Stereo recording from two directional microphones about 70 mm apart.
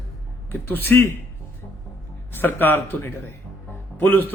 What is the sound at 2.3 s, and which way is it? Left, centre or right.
A man's voice, left.